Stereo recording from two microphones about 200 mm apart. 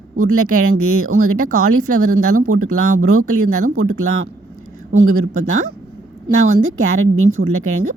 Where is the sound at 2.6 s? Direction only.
40° right (ahead or behind).